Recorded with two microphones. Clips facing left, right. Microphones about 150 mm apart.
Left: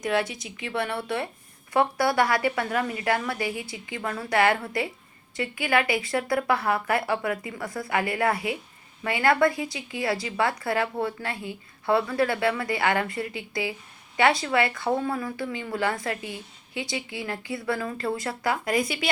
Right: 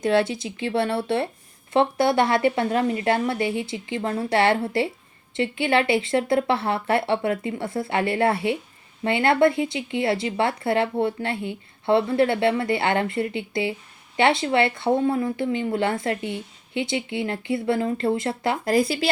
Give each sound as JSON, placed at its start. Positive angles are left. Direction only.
{"t": 0.0, "sound": "speech", "side_deg": -30}